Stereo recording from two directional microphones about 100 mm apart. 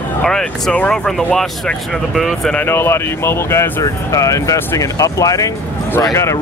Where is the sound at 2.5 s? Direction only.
20° left (ahead or behind).